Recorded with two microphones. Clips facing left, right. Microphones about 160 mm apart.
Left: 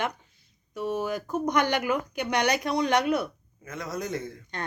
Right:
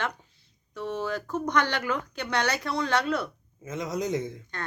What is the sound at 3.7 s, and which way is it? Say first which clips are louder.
Speech: right 3 dB; 20° right (ahead or behind).